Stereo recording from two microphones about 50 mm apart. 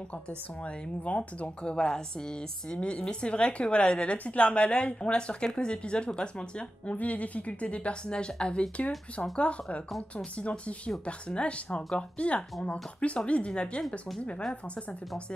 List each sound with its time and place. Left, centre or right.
1.0 s a woman's voice: left